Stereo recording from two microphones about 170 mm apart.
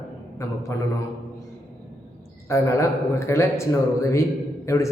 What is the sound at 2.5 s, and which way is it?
A man's voice, 15° left (ahead or behind).